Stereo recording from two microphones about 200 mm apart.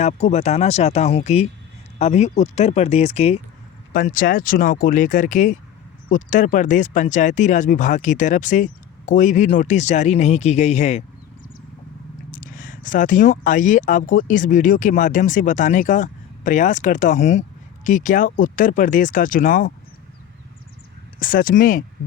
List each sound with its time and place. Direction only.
0.0 s speech: 35° left (ahead or behind)
12.3 s speech: 45° left (ahead or behind)
21.2 s speech: 45° left (ahead or behind)